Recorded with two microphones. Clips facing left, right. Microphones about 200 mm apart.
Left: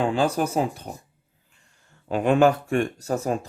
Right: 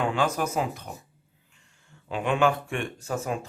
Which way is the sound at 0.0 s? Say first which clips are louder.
Left 4 dB; 30° left (ahead or behind).